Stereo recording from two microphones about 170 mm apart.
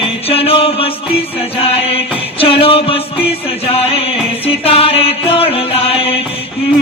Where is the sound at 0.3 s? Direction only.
35° left (ahead or behind).